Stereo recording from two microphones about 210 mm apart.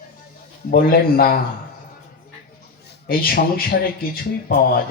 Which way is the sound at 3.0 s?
45° left (ahead or behind).